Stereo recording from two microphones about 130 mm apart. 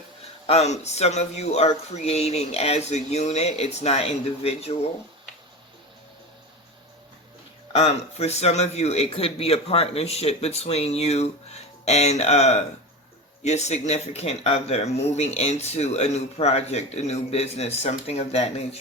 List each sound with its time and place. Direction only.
0.4 s speech: 55° left (ahead or behind)
7.7 s speech: 55° left (ahead or behind)